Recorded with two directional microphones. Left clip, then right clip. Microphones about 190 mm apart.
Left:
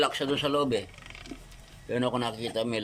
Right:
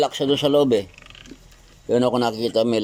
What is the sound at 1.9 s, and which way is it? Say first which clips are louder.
Speech: right 10 dB; 30° right (ahead or behind).